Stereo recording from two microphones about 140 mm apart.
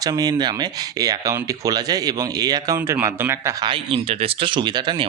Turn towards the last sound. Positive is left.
turn(degrees=-30)  # may be behind; listen again after turning